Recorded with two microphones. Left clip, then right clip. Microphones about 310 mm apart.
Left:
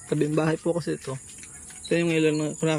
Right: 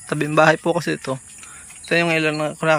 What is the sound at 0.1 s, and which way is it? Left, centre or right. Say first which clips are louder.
Speech: right 9 dB; right.